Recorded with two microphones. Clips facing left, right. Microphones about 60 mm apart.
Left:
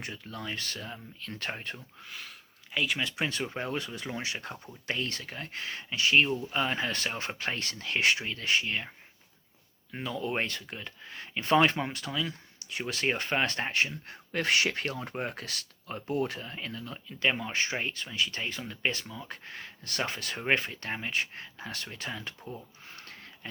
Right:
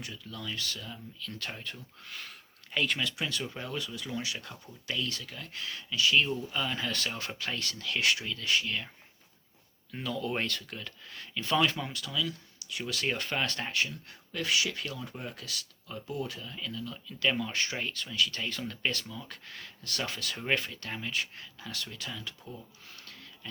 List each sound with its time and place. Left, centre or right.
0.0 s speech: left
2.0 s speech: centre
3.0 s speech: left
9.9 s speech: left
22.4 s a sound: left